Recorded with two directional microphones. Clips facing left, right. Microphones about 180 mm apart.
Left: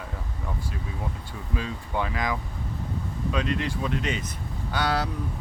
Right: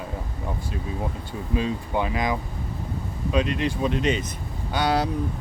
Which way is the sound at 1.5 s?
20° right (ahead or behind).